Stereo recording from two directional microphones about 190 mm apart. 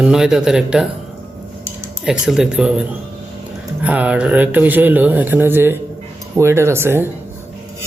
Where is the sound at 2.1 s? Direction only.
Centre (ahead or behind).